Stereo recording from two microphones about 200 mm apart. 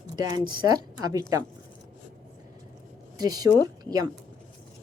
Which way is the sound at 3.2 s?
20° right (ahead or behind).